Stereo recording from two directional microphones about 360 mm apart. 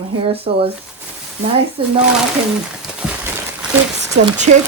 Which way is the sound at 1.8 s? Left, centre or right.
Centre.